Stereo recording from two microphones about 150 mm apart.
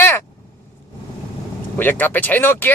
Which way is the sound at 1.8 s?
10° left (ahead or behind).